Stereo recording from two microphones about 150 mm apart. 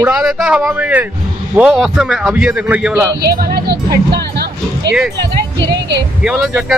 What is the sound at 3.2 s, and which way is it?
Speech, 90° right.